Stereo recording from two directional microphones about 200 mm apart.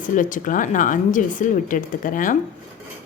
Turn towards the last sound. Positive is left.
turn(degrees=40)  # may be behind; listen again after turning